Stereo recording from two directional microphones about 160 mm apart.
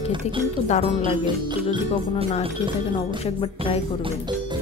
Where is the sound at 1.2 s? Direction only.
30° right (ahead or behind).